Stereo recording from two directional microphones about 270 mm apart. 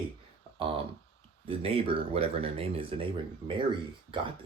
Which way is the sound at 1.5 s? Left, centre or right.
Right.